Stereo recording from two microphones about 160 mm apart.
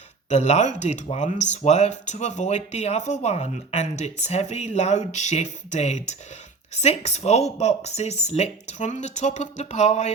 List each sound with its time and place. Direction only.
0.3 s speech: 45° left (ahead or behind)